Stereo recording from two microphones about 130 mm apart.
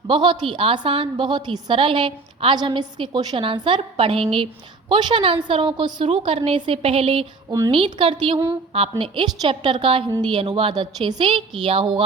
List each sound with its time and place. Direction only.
0.1 s a woman's voice: 40° right (ahead or behind)
8.7 s a woman's voice: 45° right (ahead or behind)